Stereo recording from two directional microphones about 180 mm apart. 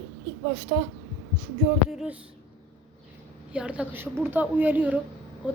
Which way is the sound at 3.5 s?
5° right (ahead or behind).